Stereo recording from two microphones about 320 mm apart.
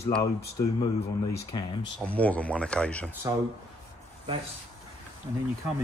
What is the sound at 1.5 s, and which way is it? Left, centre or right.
A man's voice, centre.